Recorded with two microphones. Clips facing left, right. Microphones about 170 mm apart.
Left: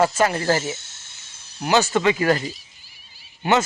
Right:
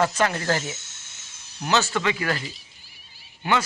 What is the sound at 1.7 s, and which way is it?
Speech, 15° left (ahead or behind).